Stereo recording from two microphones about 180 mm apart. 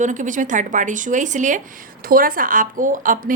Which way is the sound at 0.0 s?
45° right (ahead or behind).